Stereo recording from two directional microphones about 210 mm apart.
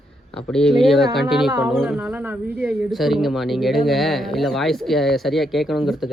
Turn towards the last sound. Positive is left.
turn(degrees=0)  # may be behind; listen again after turning